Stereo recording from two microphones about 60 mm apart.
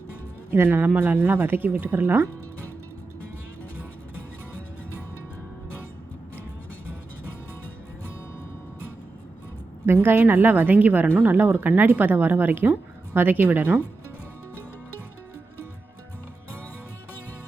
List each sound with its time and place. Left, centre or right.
0.5 s a woman's voice: right
9.8 s a woman's voice: right